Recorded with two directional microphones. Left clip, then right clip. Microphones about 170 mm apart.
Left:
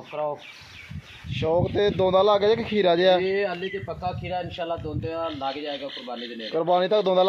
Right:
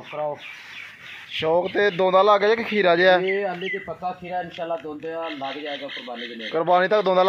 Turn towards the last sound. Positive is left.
turn(degrees=0)  # may be behind; listen again after turning